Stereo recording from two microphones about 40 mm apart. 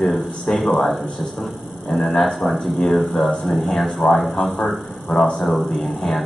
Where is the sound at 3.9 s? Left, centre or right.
Centre.